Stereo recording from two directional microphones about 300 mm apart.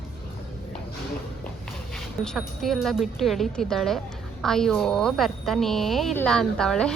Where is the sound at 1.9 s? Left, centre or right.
Centre.